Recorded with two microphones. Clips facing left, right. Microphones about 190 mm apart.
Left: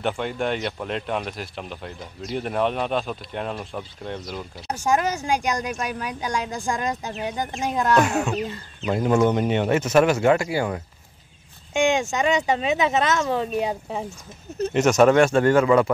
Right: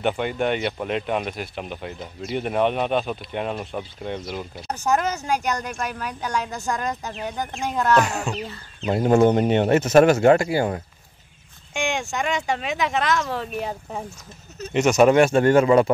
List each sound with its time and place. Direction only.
0.0 s speech: 5° right (ahead or behind)
4.6 s a woman's voice: 10° left (ahead or behind)
8.0 s speech: 5° left (ahead or behind)
8.8 s speech: 30° right (ahead or behind)
12.0 s a woman's voice: 20° left (ahead or behind)
14.7 s speech: 10° right (ahead or behind)